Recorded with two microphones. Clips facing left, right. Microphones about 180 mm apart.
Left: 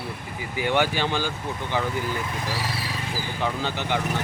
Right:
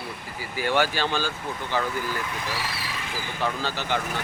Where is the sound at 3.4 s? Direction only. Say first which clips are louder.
Even; 15° left (ahead or behind).